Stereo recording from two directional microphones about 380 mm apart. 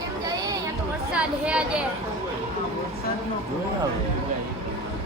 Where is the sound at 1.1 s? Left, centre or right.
Centre.